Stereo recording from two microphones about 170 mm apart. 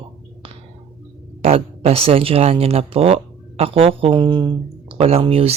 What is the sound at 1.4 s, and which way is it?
Speech, 35° right (ahead or behind).